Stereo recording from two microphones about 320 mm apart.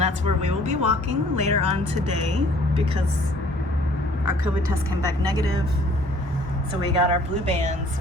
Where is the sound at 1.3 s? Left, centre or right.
Right.